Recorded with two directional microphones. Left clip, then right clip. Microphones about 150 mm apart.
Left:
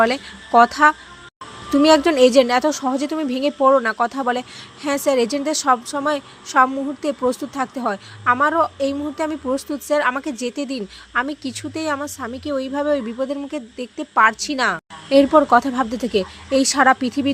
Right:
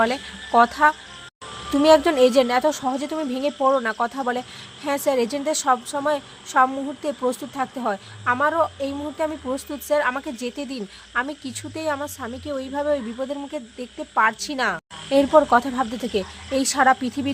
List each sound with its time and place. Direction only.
0.0 s a woman's voice: 20° left (ahead or behind)